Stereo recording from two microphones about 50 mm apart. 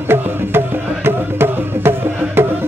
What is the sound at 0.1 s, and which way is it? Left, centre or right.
Music, right.